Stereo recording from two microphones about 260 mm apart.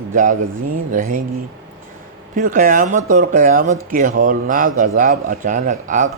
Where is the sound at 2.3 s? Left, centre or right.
Right.